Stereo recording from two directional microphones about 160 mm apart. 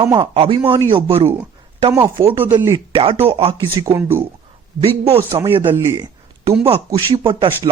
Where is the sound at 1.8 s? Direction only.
20° right (ahead or behind).